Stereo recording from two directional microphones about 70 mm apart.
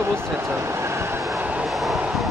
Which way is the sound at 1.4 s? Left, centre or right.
Right.